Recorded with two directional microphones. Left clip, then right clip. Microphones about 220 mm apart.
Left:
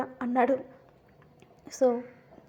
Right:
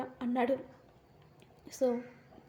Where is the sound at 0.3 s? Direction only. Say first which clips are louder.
Left 7 dB; 10° right (ahead or behind).